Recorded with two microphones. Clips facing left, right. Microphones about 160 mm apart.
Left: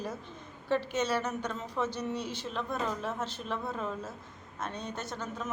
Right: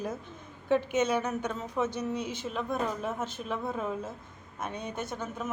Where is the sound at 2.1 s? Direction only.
50° right (ahead or behind).